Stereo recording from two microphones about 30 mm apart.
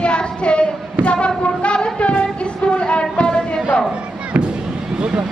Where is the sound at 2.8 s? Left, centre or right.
Left.